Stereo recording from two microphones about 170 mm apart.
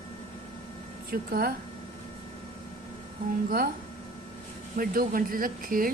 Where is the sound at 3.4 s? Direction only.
60° right (ahead or behind).